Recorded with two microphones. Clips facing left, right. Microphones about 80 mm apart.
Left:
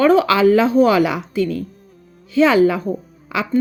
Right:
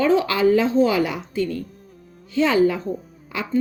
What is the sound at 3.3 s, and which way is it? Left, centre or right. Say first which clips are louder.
Speech: left 6 dB; left.